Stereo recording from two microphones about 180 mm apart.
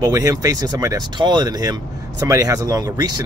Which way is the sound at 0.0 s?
20° right (ahead or behind).